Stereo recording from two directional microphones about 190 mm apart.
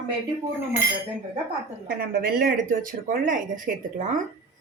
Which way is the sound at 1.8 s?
50° right (ahead or behind).